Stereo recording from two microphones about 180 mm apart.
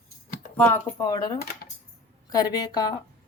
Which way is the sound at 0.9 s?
20° left (ahead or behind).